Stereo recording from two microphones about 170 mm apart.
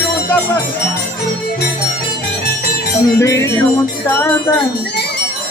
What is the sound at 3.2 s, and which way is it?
Speech, 15° left (ahead or behind).